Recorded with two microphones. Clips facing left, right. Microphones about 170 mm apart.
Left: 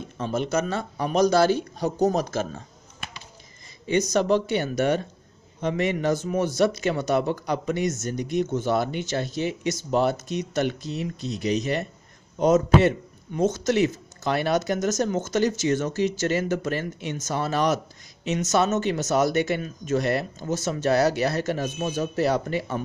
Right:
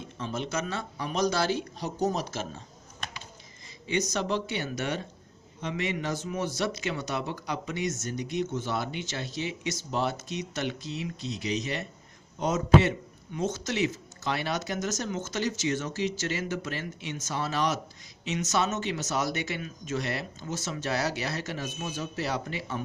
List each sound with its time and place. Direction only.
0.2 s speech: 45° left (ahead or behind)
4.1 s speech: 50° left (ahead or behind)